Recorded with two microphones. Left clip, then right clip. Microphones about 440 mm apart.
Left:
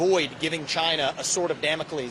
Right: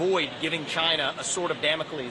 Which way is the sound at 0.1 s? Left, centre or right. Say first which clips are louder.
Left 2 dB; left.